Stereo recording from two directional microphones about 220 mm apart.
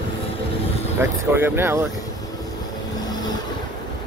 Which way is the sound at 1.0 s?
10° right (ahead or behind).